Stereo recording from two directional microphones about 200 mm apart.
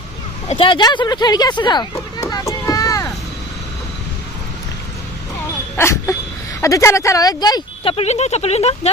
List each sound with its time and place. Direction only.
0.4 s speech: 25° left (ahead or behind)
5.7 s a sound: 15° left (ahead or behind)
6.6 s speech: 15° left (ahead or behind); by 8.9 s 30° left (ahead or behind)